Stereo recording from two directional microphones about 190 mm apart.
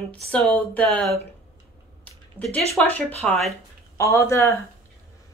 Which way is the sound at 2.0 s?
5° left (ahead or behind).